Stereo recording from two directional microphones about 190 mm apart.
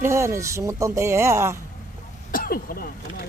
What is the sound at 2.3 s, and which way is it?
Speech, 50° left (ahead or behind).